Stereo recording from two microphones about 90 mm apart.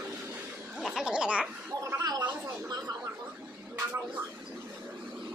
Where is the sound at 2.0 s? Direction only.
45° right (ahead or behind).